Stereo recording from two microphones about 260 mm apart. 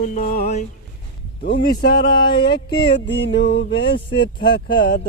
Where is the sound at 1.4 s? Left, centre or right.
Left.